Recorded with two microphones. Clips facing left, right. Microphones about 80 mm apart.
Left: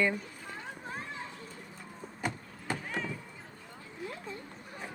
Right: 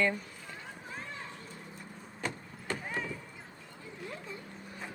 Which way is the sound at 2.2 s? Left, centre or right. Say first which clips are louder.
Left 2 dB; centre.